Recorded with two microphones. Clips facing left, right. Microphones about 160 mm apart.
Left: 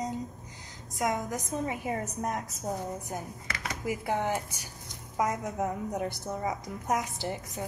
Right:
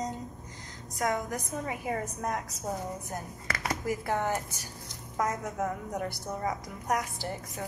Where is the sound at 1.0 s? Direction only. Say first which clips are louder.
Even; 20° left (ahead or behind).